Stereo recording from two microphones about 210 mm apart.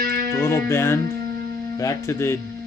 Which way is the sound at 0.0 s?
50° right (ahead or behind).